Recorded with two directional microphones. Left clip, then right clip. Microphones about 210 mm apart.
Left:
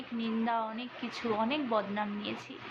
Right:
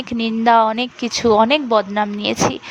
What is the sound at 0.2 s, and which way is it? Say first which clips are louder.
A woman's voice: right 19 dB; 55° right (ahead or behind).